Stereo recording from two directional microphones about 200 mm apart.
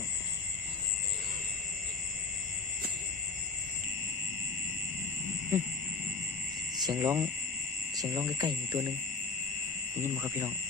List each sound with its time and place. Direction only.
5.5 s speech: 10° right (ahead or behind)
6.8 s speech: 15° right (ahead or behind)
10.0 s speech: 10° right (ahead or behind)